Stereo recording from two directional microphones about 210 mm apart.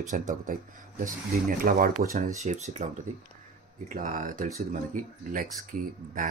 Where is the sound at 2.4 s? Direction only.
35° right (ahead or behind).